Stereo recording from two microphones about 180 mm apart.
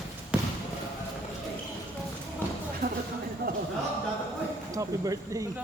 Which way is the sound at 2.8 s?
55° right (ahead or behind).